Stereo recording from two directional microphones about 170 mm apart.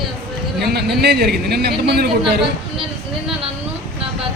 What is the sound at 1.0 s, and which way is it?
A man's voice, 70° right (ahead or behind).